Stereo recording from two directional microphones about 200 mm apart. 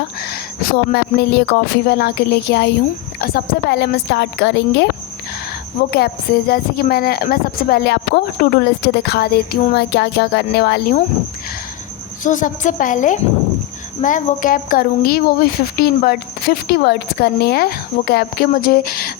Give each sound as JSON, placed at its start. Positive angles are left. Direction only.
{"t": 0.2, "sound": "a woman's voice", "side_deg": 55}
{"t": 6.5, "sound": "a woman's voice", "side_deg": 50}
{"t": 12.2, "sound": "a woman's voice", "side_deg": 40}